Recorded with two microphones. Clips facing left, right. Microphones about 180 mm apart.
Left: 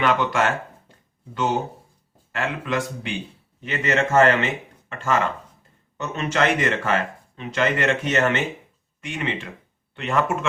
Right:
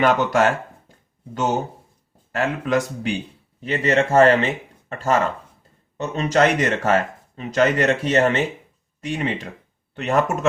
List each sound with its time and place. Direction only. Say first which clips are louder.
0.0 s speech: right 4 dB; 45° right (ahead or behind)
2.3 s speech: right 5 dB; 40° right (ahead or behind)